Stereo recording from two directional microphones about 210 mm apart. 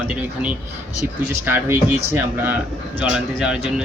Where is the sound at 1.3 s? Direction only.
10° right (ahead or behind).